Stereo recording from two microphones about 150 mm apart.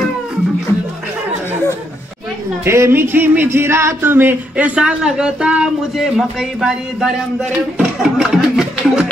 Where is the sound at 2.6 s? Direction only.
15° right (ahead or behind); by 7.1 s centre (ahead or behind).